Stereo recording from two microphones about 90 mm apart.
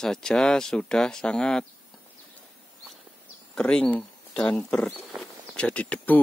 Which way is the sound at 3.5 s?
10° left (ahead or behind).